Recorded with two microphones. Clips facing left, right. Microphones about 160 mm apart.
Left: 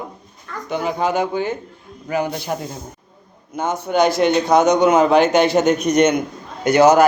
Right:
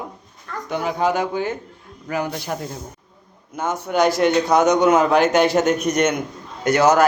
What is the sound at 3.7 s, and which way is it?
A man's voice, 10° right (ahead or behind).